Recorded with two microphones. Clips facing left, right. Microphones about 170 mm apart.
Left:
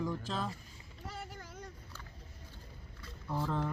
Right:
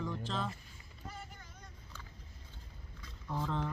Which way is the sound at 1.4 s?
45° left (ahead or behind).